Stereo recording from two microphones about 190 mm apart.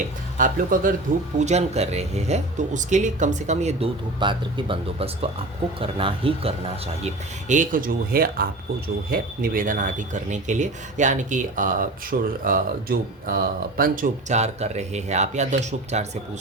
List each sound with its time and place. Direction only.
0.3 s speech: 45° right (ahead or behind); by 6.5 s 30° right (ahead or behind)
7.0 s speech: 40° right (ahead or behind)
12.1 s speech: 55° right (ahead or behind); by 16.0 s 40° right (ahead or behind)